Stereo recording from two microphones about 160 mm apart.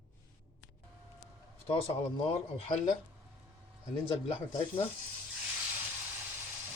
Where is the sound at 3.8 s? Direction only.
40° left (ahead or behind).